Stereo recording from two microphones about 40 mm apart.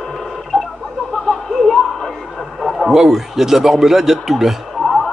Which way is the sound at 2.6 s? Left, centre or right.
Centre.